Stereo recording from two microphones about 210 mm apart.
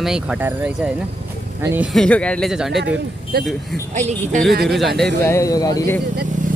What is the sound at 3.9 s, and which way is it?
Speech, 35° right (ahead or behind).